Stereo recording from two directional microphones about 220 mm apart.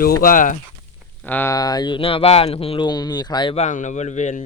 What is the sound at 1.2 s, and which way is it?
Speech, 10° left (ahead or behind).